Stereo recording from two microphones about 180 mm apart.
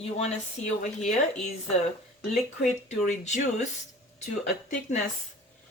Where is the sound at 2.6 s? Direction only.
40° left (ahead or behind).